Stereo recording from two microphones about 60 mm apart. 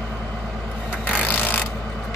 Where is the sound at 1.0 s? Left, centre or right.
Left.